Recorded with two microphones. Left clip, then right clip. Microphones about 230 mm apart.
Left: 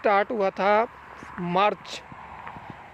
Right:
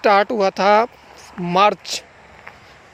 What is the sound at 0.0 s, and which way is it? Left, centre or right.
Speech, right.